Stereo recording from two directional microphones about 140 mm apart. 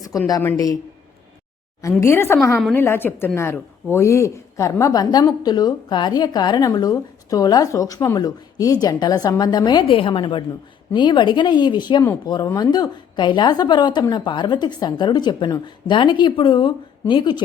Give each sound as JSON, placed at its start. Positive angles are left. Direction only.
{"t": 0.1, "sound": "a woman's voice", "side_deg": 25}
{"t": 1.8, "sound": "a woman's voice", "side_deg": 20}